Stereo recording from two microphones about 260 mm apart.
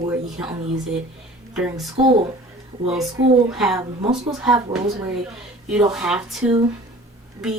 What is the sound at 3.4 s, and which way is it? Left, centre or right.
Speech, centre.